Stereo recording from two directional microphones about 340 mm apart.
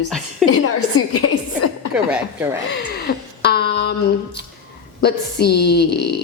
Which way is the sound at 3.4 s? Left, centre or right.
Left.